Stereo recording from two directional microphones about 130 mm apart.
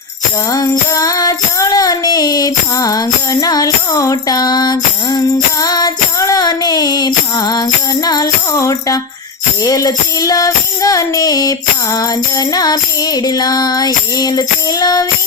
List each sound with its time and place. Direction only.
0.5 s music: 25° left (ahead or behind)